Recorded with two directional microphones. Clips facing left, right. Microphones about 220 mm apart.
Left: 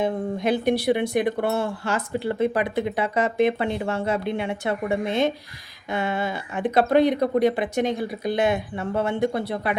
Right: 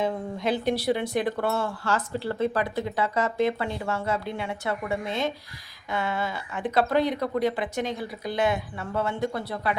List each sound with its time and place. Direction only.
0.0 s speech: 15° left (ahead or behind)